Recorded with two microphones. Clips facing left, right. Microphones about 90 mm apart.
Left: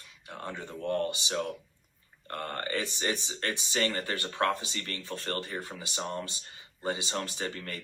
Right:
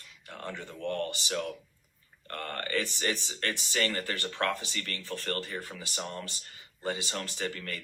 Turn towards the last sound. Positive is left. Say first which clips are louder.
# right 1 dB
turn(degrees=30)  # may be behind; listen again after turning